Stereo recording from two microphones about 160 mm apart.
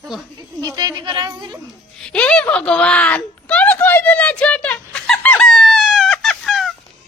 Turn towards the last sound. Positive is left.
turn(degrees=0)  # may be behind; listen again after turning